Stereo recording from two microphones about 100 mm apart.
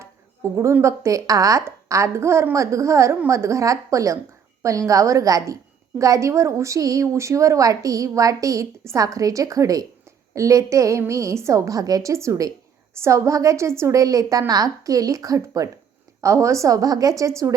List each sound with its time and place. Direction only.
0.5 s a woman's voice: 30° right (ahead or behind)